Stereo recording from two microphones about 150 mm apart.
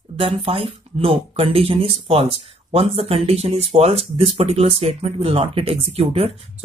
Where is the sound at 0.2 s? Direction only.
35° right (ahead or behind).